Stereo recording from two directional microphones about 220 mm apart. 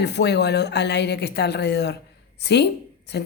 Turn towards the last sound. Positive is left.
turn(degrees=50)  # may be behind; listen again after turning